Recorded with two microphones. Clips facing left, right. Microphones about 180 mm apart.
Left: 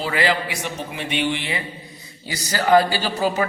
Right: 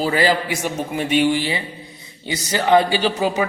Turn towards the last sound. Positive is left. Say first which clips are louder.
# right 3 dB
turn(degrees=-15)  # may be behind; listen again after turning